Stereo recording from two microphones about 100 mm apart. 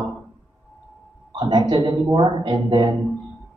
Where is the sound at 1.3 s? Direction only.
45° right (ahead or behind).